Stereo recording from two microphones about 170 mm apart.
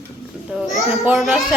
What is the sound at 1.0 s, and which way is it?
Speech, centre (ahead or behind).